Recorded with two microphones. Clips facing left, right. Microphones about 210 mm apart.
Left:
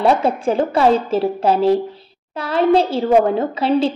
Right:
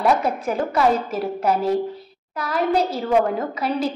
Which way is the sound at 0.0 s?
30° left (ahead or behind).